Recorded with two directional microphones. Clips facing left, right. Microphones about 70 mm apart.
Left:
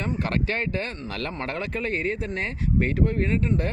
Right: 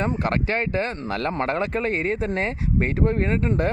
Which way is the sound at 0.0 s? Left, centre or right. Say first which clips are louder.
Right 3 dB; right.